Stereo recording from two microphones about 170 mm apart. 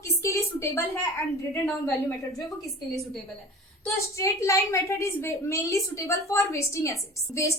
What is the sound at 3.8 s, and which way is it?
A woman's voice, 15° left (ahead or behind).